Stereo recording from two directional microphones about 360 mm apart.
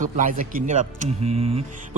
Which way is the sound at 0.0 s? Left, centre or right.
Right.